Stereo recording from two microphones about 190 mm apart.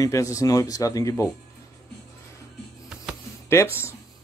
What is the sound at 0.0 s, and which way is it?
Speech, 15° left (ahead or behind).